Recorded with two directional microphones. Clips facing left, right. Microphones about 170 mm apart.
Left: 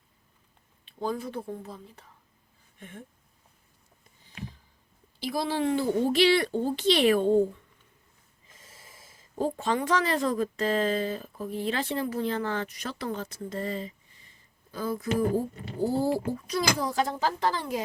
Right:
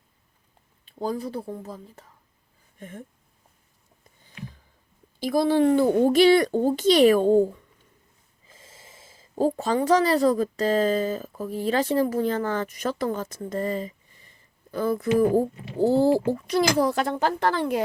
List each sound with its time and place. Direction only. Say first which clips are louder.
0.9 s speech: right 3 dB; 40° right (ahead or behind)
2.7 s a sound: right 5 dB; 40° right (ahead or behind)
5.2 s speech: right 8 dB; 50° right (ahead or behind)
8.4 s speech: right 3 dB; 30° right (ahead or behind); by 13.9 s 45° right (ahead or behind)
14.7 s speech: right 7 dB; 60° right (ahead or behind)
15.4 s speech: right 6 dB; 75° right (ahead or behind)